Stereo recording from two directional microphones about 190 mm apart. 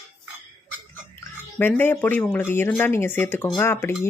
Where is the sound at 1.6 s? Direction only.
10° left (ahead or behind).